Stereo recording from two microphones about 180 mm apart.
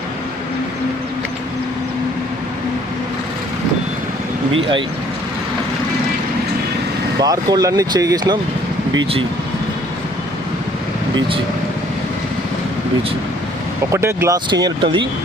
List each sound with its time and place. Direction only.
7.2 s speech: 20° right (ahead or behind)
13.9 s speech: 15° right (ahead or behind)